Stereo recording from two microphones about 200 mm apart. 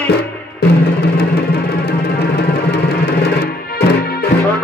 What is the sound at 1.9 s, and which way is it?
Music, 55° left (ahead or behind).